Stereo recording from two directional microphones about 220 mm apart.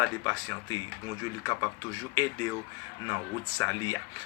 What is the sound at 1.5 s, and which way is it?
Speech, 15° left (ahead or behind).